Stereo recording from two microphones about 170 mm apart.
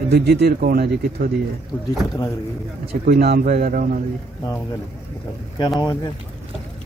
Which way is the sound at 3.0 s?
65° right (ahead or behind).